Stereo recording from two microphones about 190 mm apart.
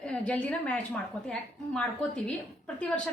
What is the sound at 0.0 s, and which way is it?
A woman's voice, 5° left (ahead or behind).